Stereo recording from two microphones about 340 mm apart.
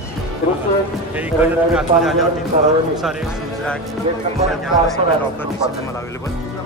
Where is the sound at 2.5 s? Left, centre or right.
Centre.